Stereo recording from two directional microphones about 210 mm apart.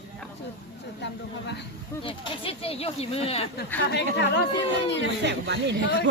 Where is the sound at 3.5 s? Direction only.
55° left (ahead or behind).